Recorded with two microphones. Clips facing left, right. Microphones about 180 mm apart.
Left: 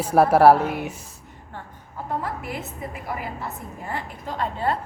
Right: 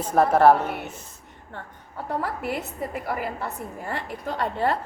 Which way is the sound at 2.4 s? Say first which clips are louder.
Right 3 dB; 65° right (ahead or behind).